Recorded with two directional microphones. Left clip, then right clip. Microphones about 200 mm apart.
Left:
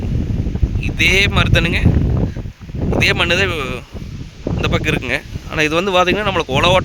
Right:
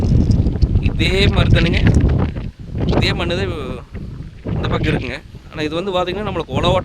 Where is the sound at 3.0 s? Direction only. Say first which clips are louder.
Left 6 dB; 5° right (ahead or behind).